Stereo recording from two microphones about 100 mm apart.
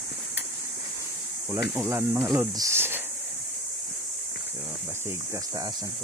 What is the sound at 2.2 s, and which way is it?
Speech, 35° right (ahead or behind).